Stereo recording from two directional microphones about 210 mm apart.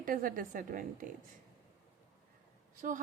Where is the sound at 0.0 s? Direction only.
40° right (ahead or behind).